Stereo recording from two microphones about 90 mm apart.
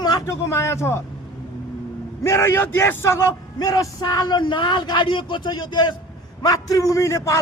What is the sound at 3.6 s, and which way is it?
Speech, 45° left (ahead or behind).